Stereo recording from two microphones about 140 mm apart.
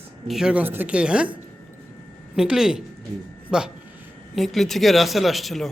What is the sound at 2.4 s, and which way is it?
A man's voice, 5° right (ahead or behind).